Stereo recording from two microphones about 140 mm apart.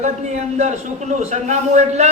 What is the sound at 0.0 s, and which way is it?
A man's voice, 55° right (ahead or behind).